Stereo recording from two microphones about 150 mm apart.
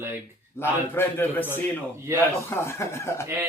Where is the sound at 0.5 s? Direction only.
15° left (ahead or behind).